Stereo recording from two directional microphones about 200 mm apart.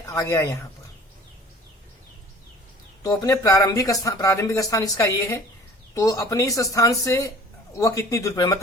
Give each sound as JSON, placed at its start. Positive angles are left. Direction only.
{"t": 0.1, "sound": "speech", "side_deg": 15}
{"t": 3.0, "sound": "speech", "side_deg": 15}